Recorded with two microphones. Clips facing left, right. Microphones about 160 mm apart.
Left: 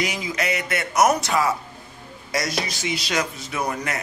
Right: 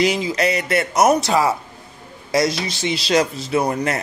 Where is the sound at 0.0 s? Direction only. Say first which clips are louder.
Right 7 dB; 30° right (ahead or behind).